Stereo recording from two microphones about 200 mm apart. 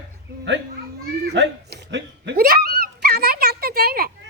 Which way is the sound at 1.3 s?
60° right (ahead or behind).